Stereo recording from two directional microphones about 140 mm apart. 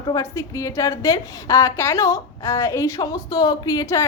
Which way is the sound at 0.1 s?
20° left (ahead or behind).